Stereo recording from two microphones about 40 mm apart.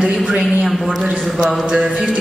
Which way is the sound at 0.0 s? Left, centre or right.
Centre.